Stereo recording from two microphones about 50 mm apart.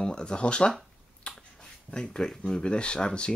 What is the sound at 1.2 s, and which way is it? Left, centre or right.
Finger snapping, centre.